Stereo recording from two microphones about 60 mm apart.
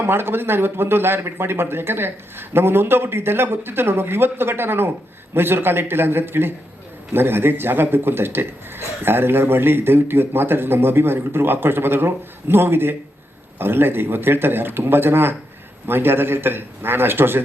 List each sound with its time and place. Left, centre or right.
0.0 s a man's voice: right